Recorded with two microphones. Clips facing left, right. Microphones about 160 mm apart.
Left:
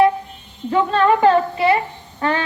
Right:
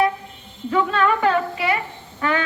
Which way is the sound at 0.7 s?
30° left (ahead or behind).